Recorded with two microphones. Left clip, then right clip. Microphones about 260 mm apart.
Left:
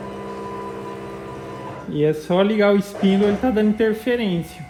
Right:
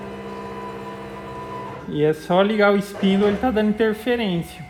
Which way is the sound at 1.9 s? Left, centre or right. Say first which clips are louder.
Even; right.